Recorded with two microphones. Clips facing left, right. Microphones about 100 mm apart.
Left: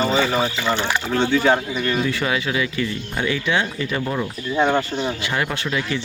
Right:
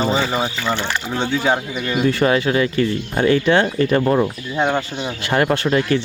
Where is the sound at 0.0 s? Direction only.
20° right (ahead or behind).